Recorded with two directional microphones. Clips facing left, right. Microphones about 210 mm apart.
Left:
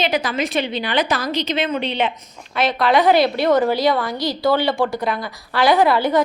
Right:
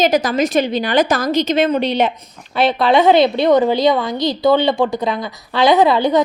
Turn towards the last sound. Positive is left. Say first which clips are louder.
# right 3 dB
turn(degrees=-20)  # may be behind; listen again after turning